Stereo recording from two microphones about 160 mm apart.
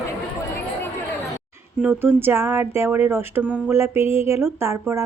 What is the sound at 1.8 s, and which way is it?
Speech, 10° right (ahead or behind).